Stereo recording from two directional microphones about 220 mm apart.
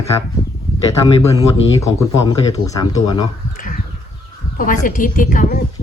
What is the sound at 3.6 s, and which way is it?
Bird, 40° left (ahead or behind).